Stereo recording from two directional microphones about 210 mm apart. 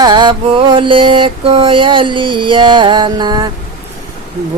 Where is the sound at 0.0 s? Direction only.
20° right (ahead or behind).